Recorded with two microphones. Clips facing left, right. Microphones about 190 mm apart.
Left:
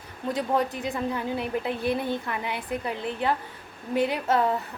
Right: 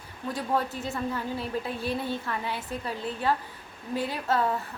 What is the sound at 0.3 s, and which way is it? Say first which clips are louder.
A woman's voice: left 3 dB; 20° left (ahead or behind).